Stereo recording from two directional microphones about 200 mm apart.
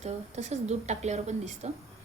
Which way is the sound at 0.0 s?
35° right (ahead or behind).